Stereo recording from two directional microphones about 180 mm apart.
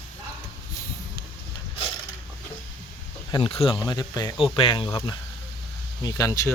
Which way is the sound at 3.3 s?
30° left (ahead or behind).